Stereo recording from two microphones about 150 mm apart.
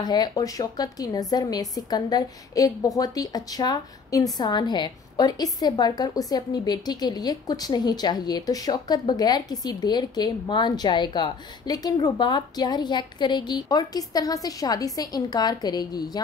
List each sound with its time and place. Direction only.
0.0 s a woman's voice: 25° left (ahead or behind)